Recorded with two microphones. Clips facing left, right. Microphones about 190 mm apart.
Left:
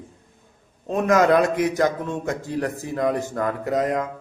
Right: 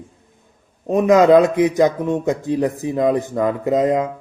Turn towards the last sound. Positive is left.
turn(degrees=-20)  # may be behind; listen again after turning